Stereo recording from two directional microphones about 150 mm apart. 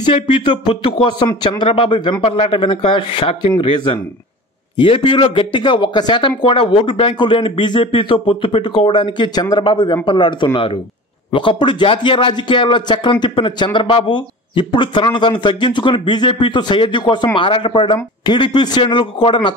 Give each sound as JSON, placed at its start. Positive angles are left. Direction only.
{"t": 0.0, "sound": "speech", "side_deg": 35}